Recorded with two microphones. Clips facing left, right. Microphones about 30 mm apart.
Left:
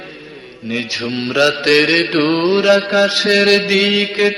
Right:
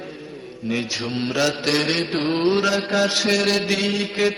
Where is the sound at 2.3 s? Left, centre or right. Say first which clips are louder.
Left 6 dB; left.